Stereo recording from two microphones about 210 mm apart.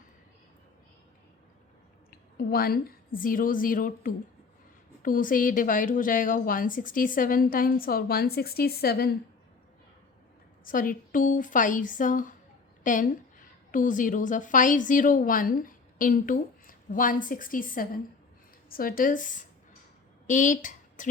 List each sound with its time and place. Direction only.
2.0 s a woman's voice: 45° left (ahead or behind)
10.6 s a woman's voice: 40° left (ahead or behind)